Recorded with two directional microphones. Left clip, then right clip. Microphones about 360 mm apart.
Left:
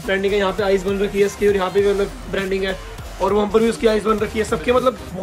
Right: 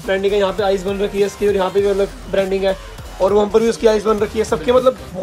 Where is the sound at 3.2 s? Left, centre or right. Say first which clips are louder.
Right 3 dB; centre.